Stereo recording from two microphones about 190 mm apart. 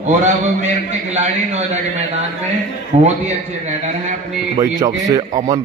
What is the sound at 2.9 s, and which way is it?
Speech, 35° right (ahead or behind).